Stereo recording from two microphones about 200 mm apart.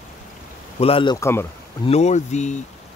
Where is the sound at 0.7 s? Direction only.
30° left (ahead or behind).